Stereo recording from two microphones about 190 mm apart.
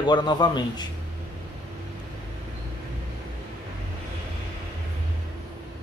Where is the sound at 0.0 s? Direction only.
25° left (ahead or behind).